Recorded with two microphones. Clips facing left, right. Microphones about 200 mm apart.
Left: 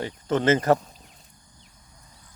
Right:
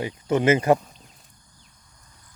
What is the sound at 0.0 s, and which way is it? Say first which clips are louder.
Speech: right 2 dB; 10° right (ahead or behind).